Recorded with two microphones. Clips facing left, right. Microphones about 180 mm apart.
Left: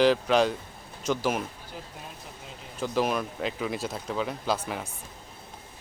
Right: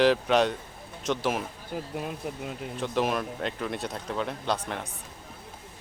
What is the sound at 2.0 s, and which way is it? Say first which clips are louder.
Speech: right 10 dB; 65° right (ahead or behind).